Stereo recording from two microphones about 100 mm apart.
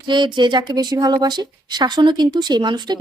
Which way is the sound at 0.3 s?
50° right (ahead or behind).